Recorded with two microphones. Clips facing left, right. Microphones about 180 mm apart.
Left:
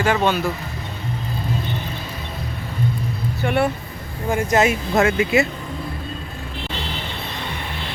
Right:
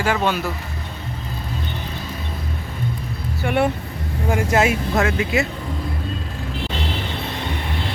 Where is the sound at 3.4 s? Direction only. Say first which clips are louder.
Even; 15° right (ahead or behind).